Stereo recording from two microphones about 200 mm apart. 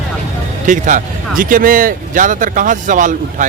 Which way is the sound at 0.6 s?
40° right (ahead or behind).